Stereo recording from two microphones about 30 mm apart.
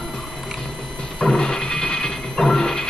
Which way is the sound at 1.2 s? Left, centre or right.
Left.